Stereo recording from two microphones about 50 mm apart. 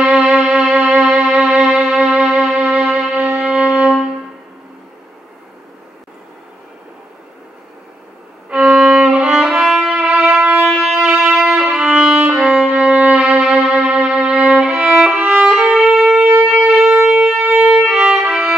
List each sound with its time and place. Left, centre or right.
0.0 s music: right
3.2 s music: right
8.5 s violin: centre
10.6 s wind instrument: centre
11.1 s music: centre
13.3 s violin: right
15.7 s music: centre
16.4 s shofar: centre
17.5 s violin: right
17.7 s violin: centre
18.2 s violin: right